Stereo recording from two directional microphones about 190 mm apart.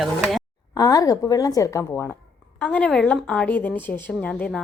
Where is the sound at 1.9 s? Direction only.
Centre (ahead or behind).